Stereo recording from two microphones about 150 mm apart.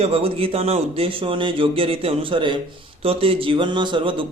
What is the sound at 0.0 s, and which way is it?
A man's voice, 40° right (ahead or behind).